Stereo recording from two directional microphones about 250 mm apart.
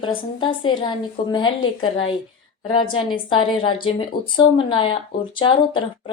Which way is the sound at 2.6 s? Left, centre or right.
Centre.